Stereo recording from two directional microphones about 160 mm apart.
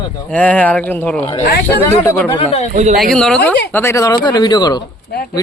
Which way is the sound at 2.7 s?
45° right (ahead or behind).